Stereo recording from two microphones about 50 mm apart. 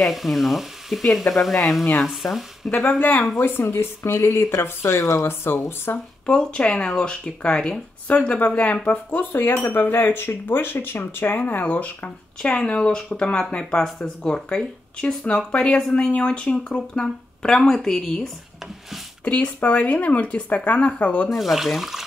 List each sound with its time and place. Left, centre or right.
0.0 s speech: centre
3.0 s speech: left
6.4 s speech: left
8.1 s speech: left
12.4 s speech: centre
19.2 s speech: left
21.3 s speech: centre